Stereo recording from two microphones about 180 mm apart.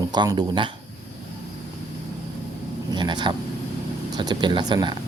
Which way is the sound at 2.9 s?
25° right (ahead or behind).